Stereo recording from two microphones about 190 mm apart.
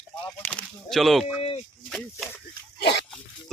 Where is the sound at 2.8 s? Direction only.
65° left (ahead or behind).